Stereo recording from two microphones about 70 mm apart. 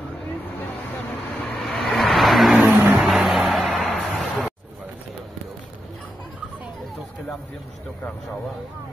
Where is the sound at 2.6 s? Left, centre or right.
Right.